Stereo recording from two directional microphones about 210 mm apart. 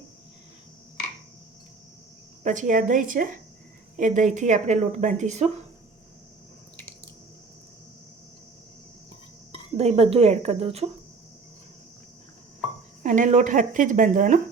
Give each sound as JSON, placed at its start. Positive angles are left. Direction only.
{"t": 2.4, "sound": "speech", "side_deg": -35}
{"t": 9.7, "sound": "speech", "side_deg": -30}
{"t": 13.0, "sound": "speech", "side_deg": -35}